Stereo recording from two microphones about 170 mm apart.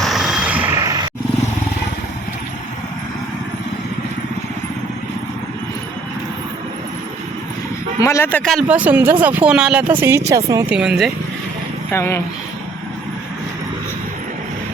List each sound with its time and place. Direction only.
0.0 s a sound: centre (ahead or behind); by 1.1 s 20° right (ahead or behind)
8.0 s speech: 15° left (ahead or behind)
8.6 s speech: 10° right (ahead or behind)
10.8 s speech: centre (ahead or behind)
11.9 s speech: 15° left (ahead or behind)